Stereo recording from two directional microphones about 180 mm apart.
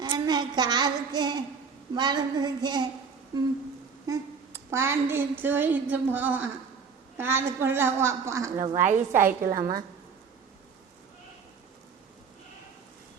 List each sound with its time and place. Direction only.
0.0 s a woman's voice: 25° right (ahead or behind)
4.0 s a woman's voice: 15° right (ahead or behind)
8.8 s a woman's voice: 45° right (ahead or behind)
9.4 s a woman's voice: 20° right (ahead or behind)